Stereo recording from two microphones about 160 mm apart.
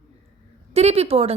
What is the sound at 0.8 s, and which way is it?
Speech, 40° right (ahead or behind).